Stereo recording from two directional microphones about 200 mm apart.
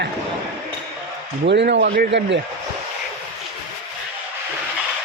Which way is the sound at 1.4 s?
60° right (ahead or behind).